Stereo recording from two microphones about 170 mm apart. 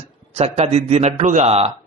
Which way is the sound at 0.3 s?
40° right (ahead or behind).